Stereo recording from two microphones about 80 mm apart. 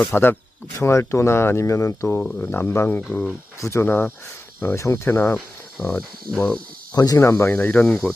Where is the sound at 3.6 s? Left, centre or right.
Left.